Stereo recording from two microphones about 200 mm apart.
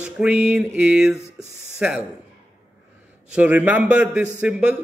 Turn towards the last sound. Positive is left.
turn(degrees=-5)  # may be behind; listen again after turning